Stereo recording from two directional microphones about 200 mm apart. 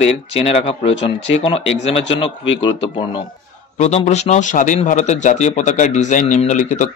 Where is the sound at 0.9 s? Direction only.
65° left (ahead or behind).